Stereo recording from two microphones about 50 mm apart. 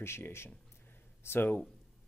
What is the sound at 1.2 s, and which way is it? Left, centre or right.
Speech, left.